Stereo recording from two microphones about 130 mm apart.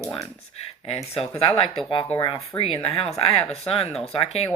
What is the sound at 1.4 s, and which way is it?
Speech, 50° left (ahead or behind).